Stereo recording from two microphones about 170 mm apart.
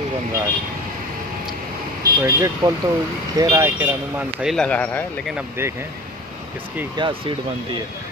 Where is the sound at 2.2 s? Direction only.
20° right (ahead or behind).